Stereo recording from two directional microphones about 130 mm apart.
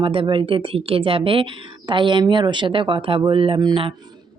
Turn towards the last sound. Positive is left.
turn(degrees=-40)  # may be behind; listen again after turning